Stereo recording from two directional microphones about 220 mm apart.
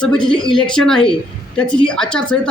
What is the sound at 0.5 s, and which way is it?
Speech, centre (ahead or behind).